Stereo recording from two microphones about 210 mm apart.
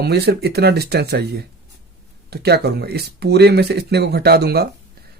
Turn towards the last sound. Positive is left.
turn(degrees=-50)  # may be behind; listen again after turning